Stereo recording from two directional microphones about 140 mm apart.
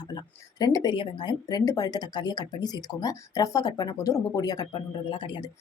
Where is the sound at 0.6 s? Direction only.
30° left (ahead or behind).